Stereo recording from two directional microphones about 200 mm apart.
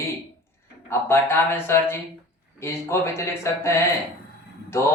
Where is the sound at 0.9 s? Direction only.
10° left (ahead or behind).